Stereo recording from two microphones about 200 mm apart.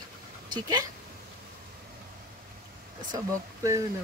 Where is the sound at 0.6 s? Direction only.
20° right (ahead or behind).